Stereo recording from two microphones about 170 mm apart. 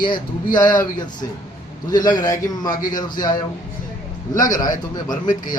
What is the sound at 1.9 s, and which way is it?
Speech, 25° left (ahead or behind).